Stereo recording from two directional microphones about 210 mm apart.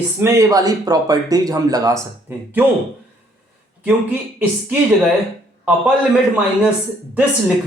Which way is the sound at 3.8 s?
5° right (ahead or behind).